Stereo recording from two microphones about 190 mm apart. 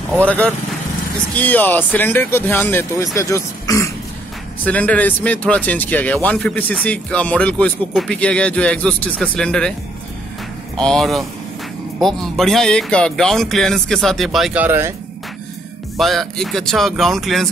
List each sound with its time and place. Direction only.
0.2 s speech: 5° left (ahead or behind)
10.8 s speech: centre (ahead or behind)
16.0 s speech: centre (ahead or behind)